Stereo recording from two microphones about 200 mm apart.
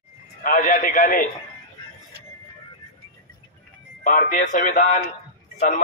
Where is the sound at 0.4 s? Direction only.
40° left (ahead or behind).